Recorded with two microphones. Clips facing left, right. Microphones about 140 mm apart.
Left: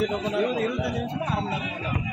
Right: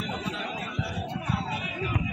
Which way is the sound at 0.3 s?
80° left.